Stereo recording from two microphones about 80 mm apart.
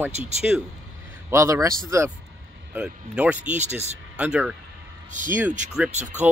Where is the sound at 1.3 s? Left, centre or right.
Right.